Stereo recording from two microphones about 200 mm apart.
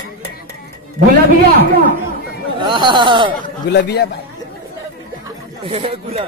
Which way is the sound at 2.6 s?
25° right (ahead or behind).